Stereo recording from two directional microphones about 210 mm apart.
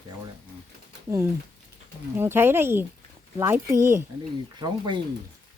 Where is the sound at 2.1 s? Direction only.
10° right (ahead or behind).